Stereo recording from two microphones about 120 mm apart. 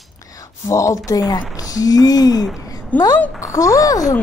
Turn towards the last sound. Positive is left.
turn(degrees=30)  # may be behind; listen again after turning